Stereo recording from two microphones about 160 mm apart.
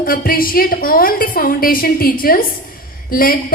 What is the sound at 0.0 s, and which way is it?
A woman's voice, 65° left (ahead or behind).